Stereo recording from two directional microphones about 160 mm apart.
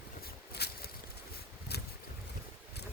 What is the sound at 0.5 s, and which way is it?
Boat, 90° left.